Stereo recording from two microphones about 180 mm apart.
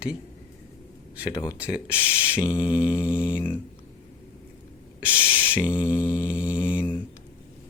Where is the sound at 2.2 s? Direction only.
15° left (ahead or behind).